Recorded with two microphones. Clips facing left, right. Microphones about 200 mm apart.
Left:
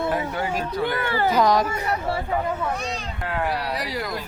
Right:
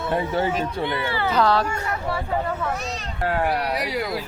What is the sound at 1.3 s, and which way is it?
Speech, 15° left (ahead or behind).